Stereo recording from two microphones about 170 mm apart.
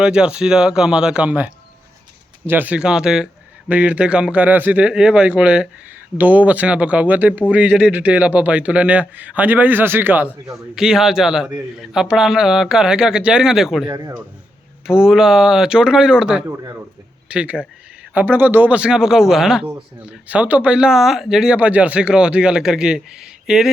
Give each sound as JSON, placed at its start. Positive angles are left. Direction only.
{"t": 0.0, "sound": "a man's voice", "side_deg": -5}
{"t": 2.5, "sound": "a man's voice", "side_deg": -10}
{"t": 10.8, "sound": "a man's voice", "side_deg": -5}
{"t": 13.9, "sound": "speech", "side_deg": -20}
{"t": 14.8, "sound": "a man's voice", "side_deg": -5}